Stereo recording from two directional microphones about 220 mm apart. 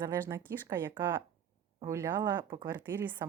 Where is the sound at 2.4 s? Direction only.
20° right (ahead or behind).